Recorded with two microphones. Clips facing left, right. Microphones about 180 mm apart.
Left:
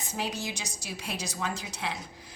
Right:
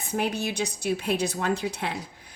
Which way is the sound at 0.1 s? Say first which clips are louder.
Right 7 dB; 55° right (ahead or behind).